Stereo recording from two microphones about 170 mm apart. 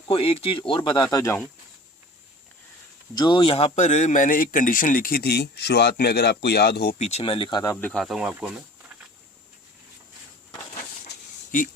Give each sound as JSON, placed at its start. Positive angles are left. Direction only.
{"t": 0.1, "sound": "speech", "side_deg": 35}
{"t": 3.2, "sound": "speech", "side_deg": 25}
{"t": 7.0, "sound": "speech", "side_deg": 35}
{"t": 8.0, "sound": "speech", "side_deg": -5}